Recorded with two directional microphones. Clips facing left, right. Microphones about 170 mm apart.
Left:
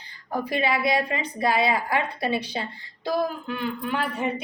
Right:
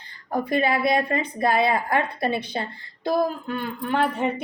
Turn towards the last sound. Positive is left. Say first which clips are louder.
# right 4 dB
turn(degrees=-50)  # may be behind; listen again after turning